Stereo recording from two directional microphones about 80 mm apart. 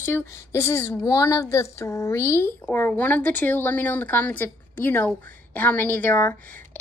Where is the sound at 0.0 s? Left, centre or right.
Left.